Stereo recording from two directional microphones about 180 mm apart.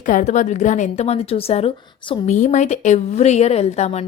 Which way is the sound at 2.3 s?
40° left (ahead or behind).